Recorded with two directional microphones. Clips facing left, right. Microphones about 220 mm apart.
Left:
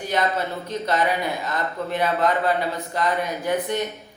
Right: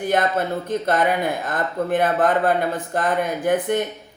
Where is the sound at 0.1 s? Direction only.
50° right (ahead or behind).